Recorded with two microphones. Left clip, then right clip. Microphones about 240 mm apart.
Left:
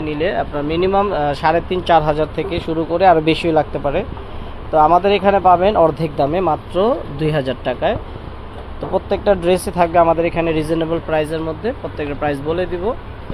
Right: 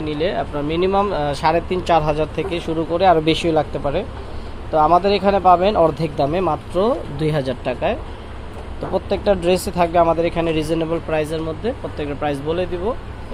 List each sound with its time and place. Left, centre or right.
0.0 s speech: centre